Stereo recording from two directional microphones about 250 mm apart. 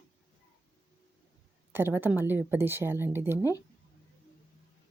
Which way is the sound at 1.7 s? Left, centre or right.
Centre.